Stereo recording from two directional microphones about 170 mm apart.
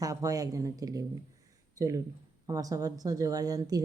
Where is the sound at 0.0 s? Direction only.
20° right (ahead or behind).